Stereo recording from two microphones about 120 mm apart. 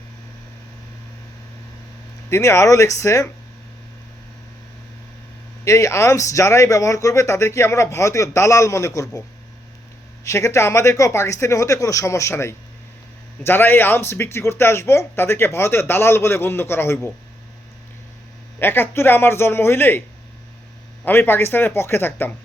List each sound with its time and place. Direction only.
2.3 s speech: 25° left (ahead or behind)
5.6 s speech: 25° left (ahead or behind)
10.2 s speech: 25° left (ahead or behind)
18.6 s speech: 20° left (ahead or behind)
21.0 s speech: 20° left (ahead or behind)